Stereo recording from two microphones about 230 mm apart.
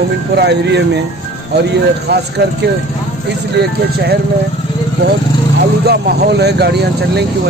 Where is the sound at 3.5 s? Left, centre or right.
Right.